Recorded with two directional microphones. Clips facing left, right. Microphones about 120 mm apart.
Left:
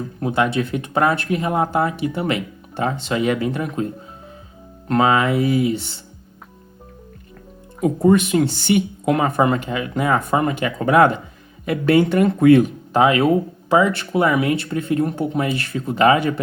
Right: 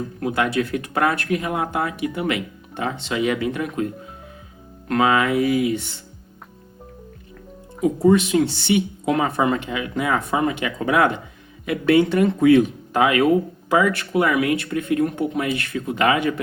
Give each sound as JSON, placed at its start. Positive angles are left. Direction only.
{"t": 0.2, "sound": "speech", "side_deg": 25}
{"t": 4.9, "sound": "speech", "side_deg": 30}
{"t": 8.0, "sound": "speech", "side_deg": 45}
{"t": 12.9, "sound": "speech", "side_deg": 30}